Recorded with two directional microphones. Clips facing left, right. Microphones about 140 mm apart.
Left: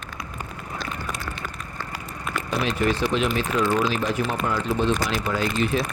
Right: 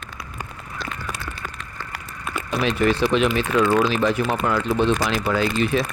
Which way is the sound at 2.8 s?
75° right (ahead or behind).